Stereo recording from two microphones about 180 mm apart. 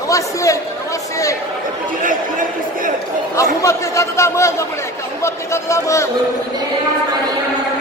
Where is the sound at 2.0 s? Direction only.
50° right (ahead or behind).